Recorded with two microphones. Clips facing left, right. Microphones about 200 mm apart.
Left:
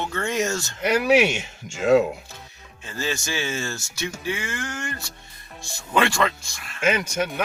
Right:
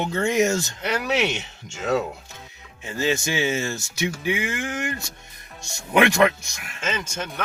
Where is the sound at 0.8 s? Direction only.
10° left (ahead or behind).